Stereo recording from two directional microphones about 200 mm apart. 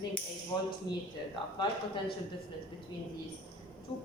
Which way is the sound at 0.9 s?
20° left (ahead or behind).